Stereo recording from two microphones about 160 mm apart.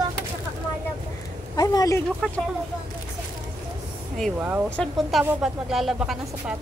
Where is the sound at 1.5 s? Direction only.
20° left (ahead or behind).